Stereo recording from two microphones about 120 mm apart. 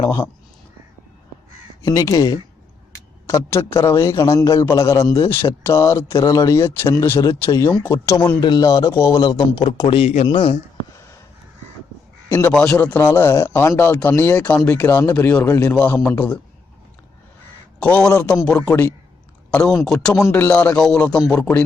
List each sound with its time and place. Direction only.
0.0 s speech: 30° left (ahead or behind)
1.8 s speech: 30° left (ahead or behind)
9.6 s a man's voice: 45° left (ahead or behind); by 10.2 s 60° left (ahead or behind)
10.2 s a man's voice: 50° left (ahead or behind)
12.3 s a man's voice: 20° left (ahead or behind)
17.7 s a man's voice: 10° left (ahead or behind)
19.5 s speech: 10° left (ahead or behind)
20.1 s a man's voice: 20° left (ahead or behind)